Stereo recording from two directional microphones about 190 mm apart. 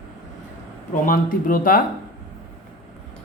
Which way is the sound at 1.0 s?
45° left (ahead or behind).